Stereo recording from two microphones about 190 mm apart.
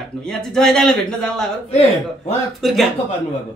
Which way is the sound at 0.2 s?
5° left (ahead or behind).